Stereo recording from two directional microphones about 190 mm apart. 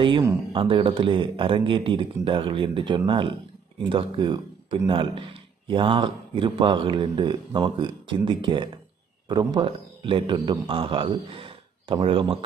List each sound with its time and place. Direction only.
0.0 s a man's voice: 25° right (ahead or behind)